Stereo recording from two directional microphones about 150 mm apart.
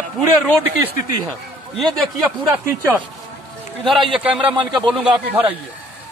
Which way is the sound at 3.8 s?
Centre (ahead or behind).